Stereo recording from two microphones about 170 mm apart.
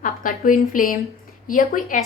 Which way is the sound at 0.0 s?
55° left (ahead or behind).